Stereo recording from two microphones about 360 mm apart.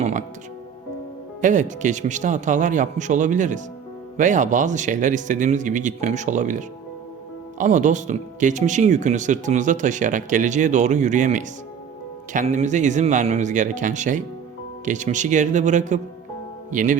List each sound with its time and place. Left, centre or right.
0.0 s music: centre
1.4 s speech: right